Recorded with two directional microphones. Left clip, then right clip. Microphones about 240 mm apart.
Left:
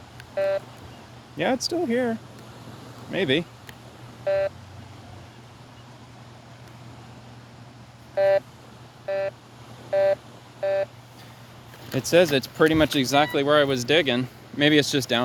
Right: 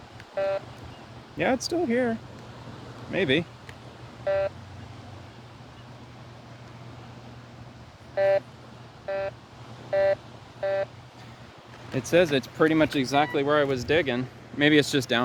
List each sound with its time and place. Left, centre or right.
0.3 s vehicle: left
1.4 s speech: centre
4.3 s vehicle: left
8.1 s vehicle: left
9.9 s telephone dialing: left
11.9 s speech: left
14.6 s speech: centre